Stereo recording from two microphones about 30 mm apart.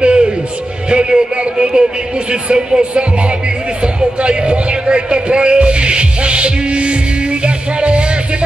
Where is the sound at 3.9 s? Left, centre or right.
Right.